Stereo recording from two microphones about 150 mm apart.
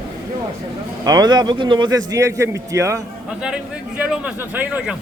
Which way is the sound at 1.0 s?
25° right (ahead or behind).